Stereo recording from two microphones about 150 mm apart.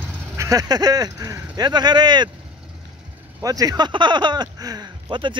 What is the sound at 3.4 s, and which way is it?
Speech, 25° right (ahead or behind).